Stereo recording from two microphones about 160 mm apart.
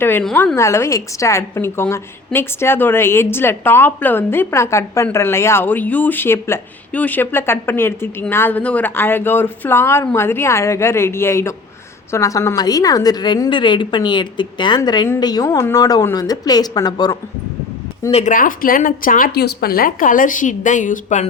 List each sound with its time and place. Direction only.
0.0 s a woman's voice: 15° left (ahead or behind)
18.1 s speech: 45° left (ahead or behind)
18.3 s speech: 60° left (ahead or behind)